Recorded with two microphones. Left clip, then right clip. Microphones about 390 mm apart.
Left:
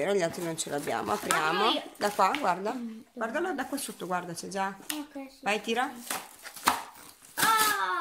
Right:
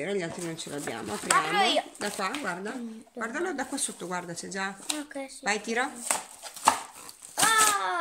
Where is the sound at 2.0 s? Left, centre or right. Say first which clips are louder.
Left 6 dB; centre.